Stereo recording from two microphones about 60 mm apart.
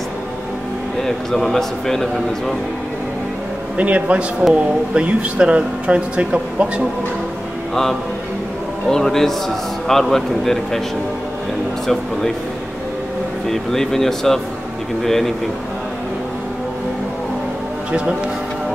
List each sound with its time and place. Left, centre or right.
1.0 s a man's voice: centre
3.7 s speech: right
8.9 s a man's voice: centre
13.5 s speech: centre